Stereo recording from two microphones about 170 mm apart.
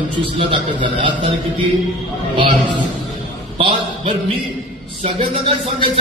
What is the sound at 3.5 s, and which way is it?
Speech, 35° right (ahead or behind).